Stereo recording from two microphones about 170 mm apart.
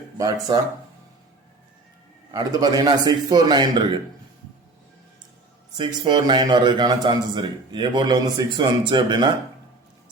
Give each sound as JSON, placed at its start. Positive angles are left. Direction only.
{"t": 2.3, "sound": "a man's voice", "side_deg": -25}
{"t": 5.7, "sound": "a man's voice", "side_deg": -25}